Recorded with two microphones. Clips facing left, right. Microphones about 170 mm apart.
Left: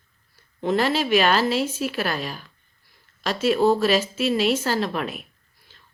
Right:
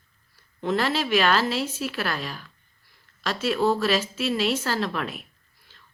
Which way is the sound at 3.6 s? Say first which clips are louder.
Left 3 dB; 25° left (ahead or behind).